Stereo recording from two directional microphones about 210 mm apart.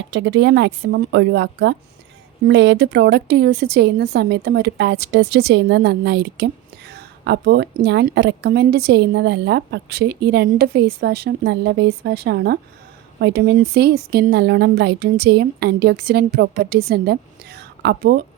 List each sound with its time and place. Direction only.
0.1 s a woman's voice: 60° right (ahead or behind)